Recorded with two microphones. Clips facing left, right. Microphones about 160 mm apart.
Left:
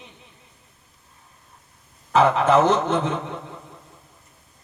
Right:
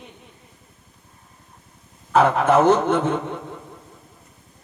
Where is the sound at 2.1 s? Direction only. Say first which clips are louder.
Right 1 dB; 50° right (ahead or behind).